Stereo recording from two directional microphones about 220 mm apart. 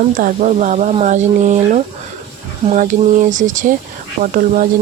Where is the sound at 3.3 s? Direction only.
35° right (ahead or behind).